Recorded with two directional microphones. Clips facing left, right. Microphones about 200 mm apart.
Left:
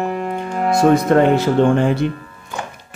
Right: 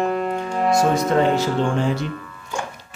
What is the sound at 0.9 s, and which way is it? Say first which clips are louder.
Speech: left 5 dB; 55° left (ahead or behind).